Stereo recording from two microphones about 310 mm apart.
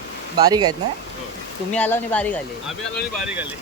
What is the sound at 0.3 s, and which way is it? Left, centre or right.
Speech, centre.